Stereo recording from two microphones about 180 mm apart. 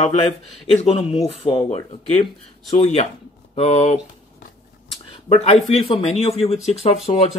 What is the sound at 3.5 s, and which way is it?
Speech, 35° left (ahead or behind).